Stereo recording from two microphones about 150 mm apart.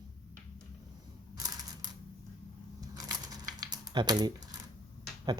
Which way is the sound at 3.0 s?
25° right (ahead or behind).